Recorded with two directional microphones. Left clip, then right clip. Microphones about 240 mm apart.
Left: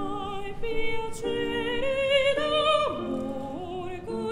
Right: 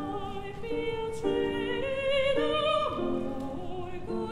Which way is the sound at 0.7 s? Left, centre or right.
Left.